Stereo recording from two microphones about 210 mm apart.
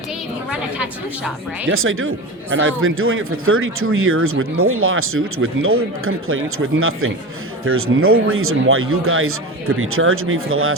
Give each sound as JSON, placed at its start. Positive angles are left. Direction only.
{"t": 0.5, "sound": "a woman's voice", "side_deg": -5}
{"t": 1.6, "sound": "speech", "side_deg": -75}